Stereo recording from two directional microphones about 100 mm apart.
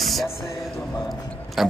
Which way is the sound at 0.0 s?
Centre (ahead or behind).